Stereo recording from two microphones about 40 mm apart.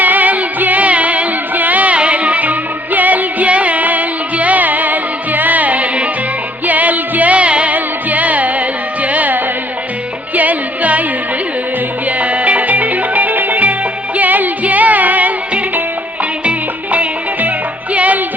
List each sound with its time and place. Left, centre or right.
0.0 s music: right
12.2 s music: right
16.5 s music: right